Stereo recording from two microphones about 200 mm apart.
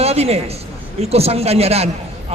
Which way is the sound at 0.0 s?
30° right (ahead or behind).